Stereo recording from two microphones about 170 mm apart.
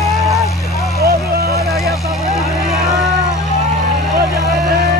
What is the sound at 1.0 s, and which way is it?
Vehicle, 65° right (ahead or behind).